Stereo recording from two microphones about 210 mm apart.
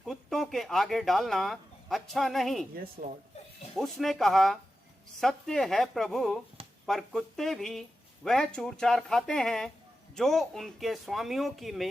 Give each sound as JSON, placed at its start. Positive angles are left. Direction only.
{"t": 0.0, "sound": "speech", "side_deg": 0}
{"t": 3.0, "sound": "speech", "side_deg": -40}
{"t": 3.8, "sound": "speech", "side_deg": 0}